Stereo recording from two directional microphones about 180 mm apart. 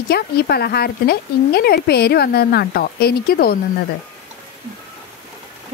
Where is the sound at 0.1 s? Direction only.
60° left (ahead or behind).